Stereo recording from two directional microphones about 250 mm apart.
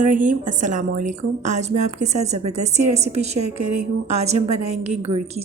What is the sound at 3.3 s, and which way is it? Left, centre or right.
Speech, right.